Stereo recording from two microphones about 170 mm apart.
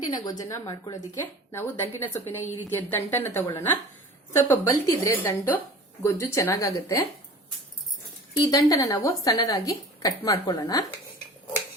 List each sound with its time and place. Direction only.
0.0 s a woman's voice: 20° left (ahead or behind)
8.4 s a woman's voice: 20° left (ahead or behind)